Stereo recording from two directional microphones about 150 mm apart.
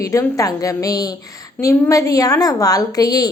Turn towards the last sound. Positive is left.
turn(degrees=25)  # may be behind; listen again after turning